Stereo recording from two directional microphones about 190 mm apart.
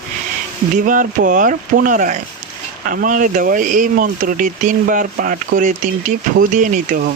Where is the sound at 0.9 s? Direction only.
45° right (ahead or behind).